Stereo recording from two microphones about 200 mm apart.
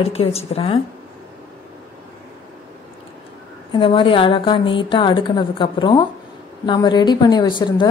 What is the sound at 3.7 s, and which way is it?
A woman's voice, 25° left (ahead or behind).